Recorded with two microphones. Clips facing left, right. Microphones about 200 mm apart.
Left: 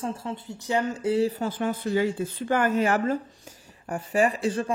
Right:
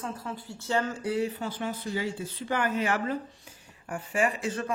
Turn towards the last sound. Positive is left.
turn(degrees=30)  # may be behind; listen again after turning